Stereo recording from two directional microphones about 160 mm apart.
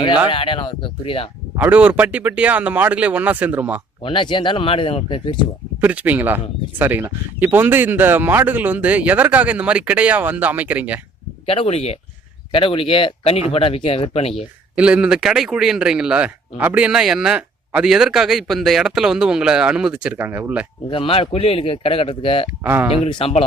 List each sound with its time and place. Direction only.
0.3 s a man's voice: 35° left (ahead or behind)
1.5 s speech: 10° right (ahead or behind)
4.0 s a man's voice: 30° left (ahead or behind)
5.8 s speech: 10° right (ahead or behind)
11.4 s a man's voice: 40° left (ahead or behind)
14.8 s a man's voice: 5° right (ahead or behind)
20.9 s a man's voice: 35° left (ahead or behind)
22.6 s speech: 10° right (ahead or behind)
23.0 s a man's voice: 35° left (ahead or behind)